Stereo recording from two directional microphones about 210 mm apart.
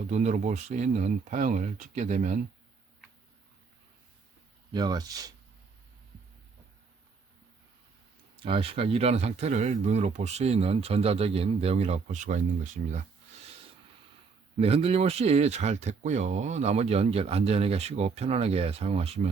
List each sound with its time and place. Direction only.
0.1 s speech: 35° right (ahead or behind)
4.7 s speech: 20° right (ahead or behind)
8.4 s speech: 25° right (ahead or behind)
14.6 s speech: 25° right (ahead or behind)